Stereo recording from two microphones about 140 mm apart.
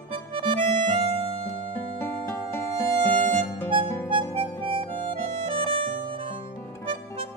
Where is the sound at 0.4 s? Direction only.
40° right (ahead or behind).